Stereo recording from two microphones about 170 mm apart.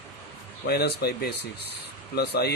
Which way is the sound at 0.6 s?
70° left (ahead or behind).